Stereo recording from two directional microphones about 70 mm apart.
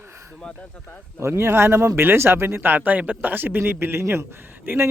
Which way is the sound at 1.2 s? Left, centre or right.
Right.